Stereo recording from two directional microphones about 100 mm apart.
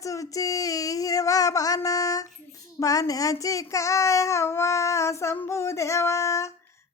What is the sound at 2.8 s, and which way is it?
Child singing, 35° left (ahead or behind).